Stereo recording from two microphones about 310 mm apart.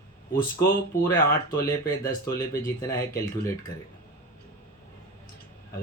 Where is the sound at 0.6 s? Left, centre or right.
Centre.